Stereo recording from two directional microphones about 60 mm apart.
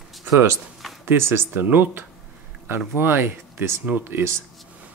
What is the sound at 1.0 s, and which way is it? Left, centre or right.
Speech, right.